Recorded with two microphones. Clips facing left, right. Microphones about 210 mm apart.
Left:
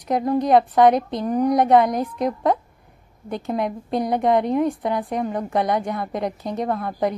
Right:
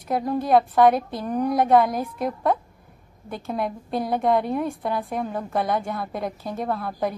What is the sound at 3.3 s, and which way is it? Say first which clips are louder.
A woman's voice: left 3 dB; 15° left (ahead or behind).